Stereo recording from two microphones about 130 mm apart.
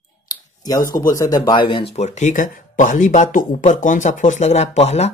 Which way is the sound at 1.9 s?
60° left (ahead or behind).